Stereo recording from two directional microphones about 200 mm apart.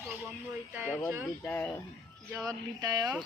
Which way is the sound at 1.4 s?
15° left (ahead or behind).